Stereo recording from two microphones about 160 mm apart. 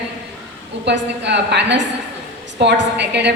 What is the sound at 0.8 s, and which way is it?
A woman's voice, 90° right.